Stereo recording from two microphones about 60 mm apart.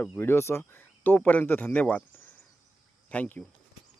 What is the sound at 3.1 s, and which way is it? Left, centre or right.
Speech, left.